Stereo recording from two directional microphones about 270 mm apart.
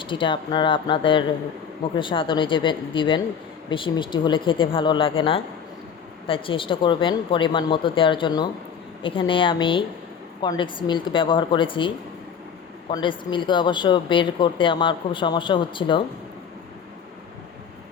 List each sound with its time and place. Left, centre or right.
0.0 s speech: centre